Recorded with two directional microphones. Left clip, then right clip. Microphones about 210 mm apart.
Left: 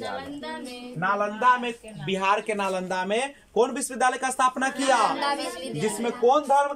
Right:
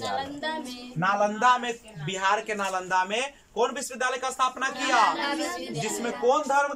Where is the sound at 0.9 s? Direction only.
5° left (ahead or behind); by 5.4 s 30° left (ahead or behind).